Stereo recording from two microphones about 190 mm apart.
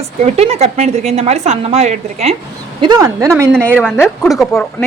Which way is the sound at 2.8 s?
20° right (ahead or behind).